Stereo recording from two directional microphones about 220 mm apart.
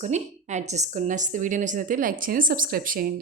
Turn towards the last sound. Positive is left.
turn(degrees=-40)  # may be behind; listen again after turning